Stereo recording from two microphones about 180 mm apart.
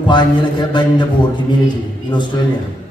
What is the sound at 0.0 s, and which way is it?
A man's voice, 25° left (ahead or behind).